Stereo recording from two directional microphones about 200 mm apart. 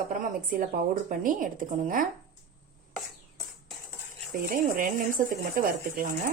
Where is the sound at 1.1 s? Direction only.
40° right (ahead or behind).